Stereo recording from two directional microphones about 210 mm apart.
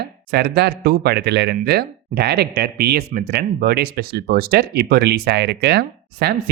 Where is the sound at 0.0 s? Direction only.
50° right (ahead or behind).